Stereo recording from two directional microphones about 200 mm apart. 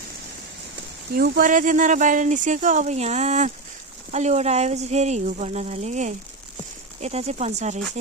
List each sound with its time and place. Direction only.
1.1 s speech: 45° right (ahead or behind)